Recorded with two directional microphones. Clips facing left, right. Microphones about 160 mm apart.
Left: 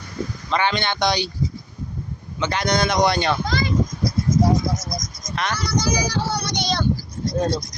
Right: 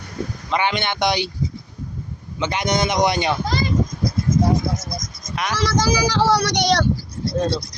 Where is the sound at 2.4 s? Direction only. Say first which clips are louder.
Even; 20° right (ahead or behind).